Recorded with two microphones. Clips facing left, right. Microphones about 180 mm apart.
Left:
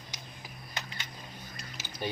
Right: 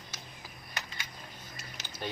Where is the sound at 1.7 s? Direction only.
10° left (ahead or behind).